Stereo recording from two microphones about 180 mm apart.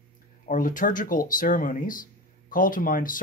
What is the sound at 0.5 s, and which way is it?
Speech, 50° left (ahead or behind).